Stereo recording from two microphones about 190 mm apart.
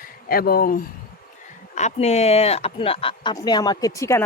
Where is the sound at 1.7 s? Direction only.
35° left (ahead or behind); by 4.2 s 15° left (ahead or behind).